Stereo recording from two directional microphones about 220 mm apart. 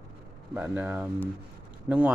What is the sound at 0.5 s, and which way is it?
Speech, 10° right (ahead or behind).